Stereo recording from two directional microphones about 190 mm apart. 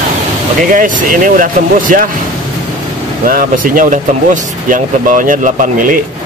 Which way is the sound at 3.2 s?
45° right (ahead or behind).